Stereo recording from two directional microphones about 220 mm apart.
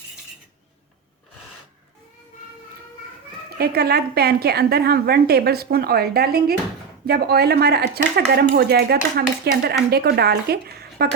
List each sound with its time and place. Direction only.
3.6 s a woman's voice: 45° right (ahead or behind)